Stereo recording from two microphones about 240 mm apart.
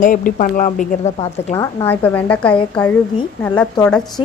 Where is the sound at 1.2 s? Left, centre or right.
Centre.